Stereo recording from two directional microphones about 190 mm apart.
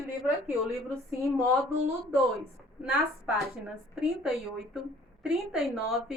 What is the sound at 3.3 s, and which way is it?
A woman's voice, centre (ahead or behind).